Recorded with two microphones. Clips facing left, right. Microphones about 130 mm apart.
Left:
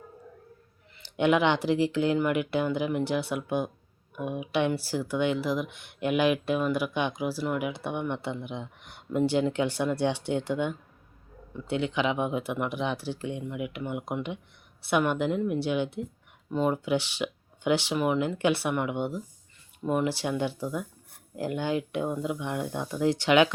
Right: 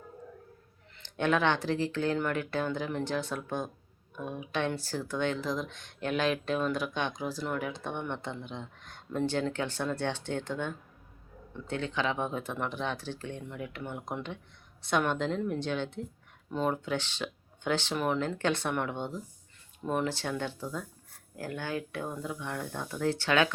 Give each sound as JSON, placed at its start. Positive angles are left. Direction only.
{"t": 0.9, "sound": "speech", "side_deg": 10}